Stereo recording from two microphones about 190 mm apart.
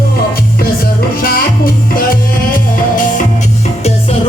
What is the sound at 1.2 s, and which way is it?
Music, 50° left (ahead or behind).